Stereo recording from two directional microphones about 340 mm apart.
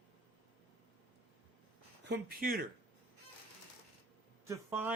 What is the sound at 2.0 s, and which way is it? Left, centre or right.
Speech, right.